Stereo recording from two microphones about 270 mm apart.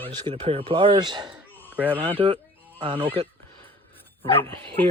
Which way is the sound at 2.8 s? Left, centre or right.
Centre.